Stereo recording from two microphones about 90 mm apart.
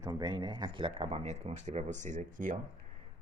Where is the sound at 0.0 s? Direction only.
50° right (ahead or behind); by 1.6 s 90° right.